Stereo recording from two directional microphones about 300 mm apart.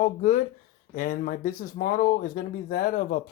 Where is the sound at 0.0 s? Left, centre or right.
Left.